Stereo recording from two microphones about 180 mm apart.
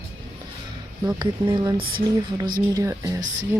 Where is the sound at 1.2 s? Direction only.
25° right (ahead or behind).